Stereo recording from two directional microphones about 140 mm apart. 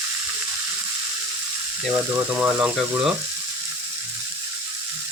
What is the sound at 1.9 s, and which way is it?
Speech, 10° right (ahead or behind).